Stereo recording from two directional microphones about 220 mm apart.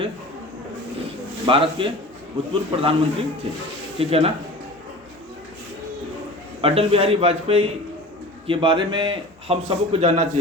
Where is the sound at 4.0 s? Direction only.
25° right (ahead or behind).